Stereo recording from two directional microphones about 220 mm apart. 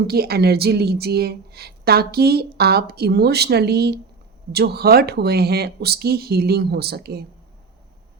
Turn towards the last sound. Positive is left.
turn(degrees=-45)  # may be behind; listen again after turning